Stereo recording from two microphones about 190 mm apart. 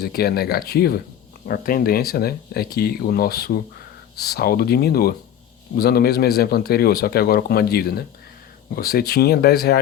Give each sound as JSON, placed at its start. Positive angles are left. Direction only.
{"t": 0.0, "sound": "a man's voice", "side_deg": 55}